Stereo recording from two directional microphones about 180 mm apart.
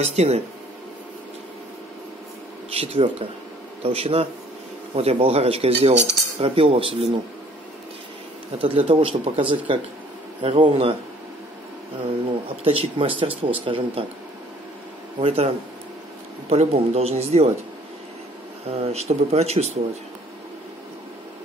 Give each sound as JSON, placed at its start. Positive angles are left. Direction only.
{"t": 0.0, "sound": "speech", "side_deg": -35}
{"t": 2.7, "sound": "speech", "side_deg": -35}
{"t": 8.5, "sound": "speech", "side_deg": -30}
{"t": 12.6, "sound": "speech", "side_deg": -30}
{"t": 15.1, "sound": "speech", "side_deg": -35}
{"t": 18.7, "sound": "speech", "side_deg": -35}